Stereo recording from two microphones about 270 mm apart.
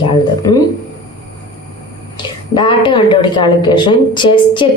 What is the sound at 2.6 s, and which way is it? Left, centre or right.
A woman's voice, centre.